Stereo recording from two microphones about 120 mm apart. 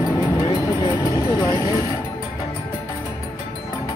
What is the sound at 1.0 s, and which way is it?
Vehicle, 30° left (ahead or behind).